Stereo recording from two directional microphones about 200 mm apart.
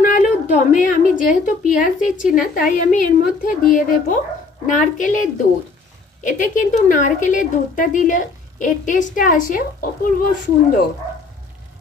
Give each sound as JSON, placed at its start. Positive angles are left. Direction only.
{"t": 0.0, "sound": "a woman's voice", "side_deg": 40}